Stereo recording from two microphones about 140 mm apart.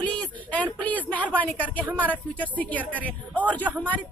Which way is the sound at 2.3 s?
10° left (ahead or behind).